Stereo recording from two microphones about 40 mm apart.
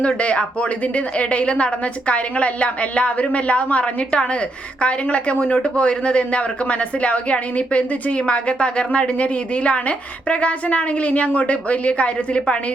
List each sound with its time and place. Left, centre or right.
0.0 s speech: left